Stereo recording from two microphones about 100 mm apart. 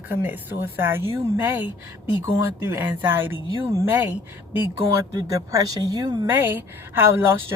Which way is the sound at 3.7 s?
30° right (ahead or behind).